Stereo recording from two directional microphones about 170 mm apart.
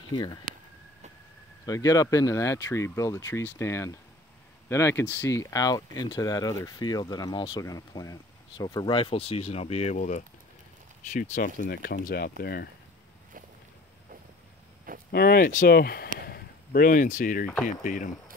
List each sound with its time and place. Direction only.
0.1 s speech: 25° left (ahead or behind)
1.7 s speech: 20° left (ahead or behind); by 11.7 s 45° left (ahead or behind)
11.7 s speech: 65° left (ahead or behind)
15.0 s speech: 65° left (ahead or behind)